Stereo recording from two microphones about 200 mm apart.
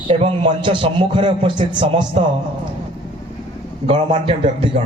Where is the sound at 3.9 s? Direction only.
25° right (ahead or behind).